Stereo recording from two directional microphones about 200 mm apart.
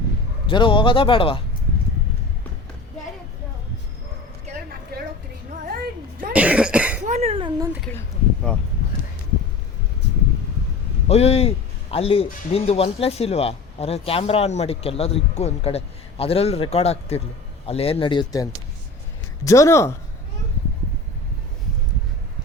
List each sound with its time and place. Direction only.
0.4 s speech: 25° left (ahead or behind)
5.6 s music: 45° right (ahead or behind)
6.3 s cough: 5° right (ahead or behind)
7.0 s speech: 30° right (ahead or behind)
11.1 s a man's voice: 30° left (ahead or behind)
19.5 s speech: 15° left (ahead or behind)